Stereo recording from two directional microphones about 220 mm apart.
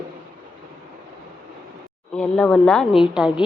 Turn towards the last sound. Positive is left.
turn(degrees=-5)  # may be behind; listen again after turning